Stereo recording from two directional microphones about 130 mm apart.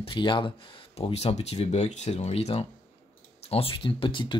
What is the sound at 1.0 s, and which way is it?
Speech, 55° left (ahead or behind).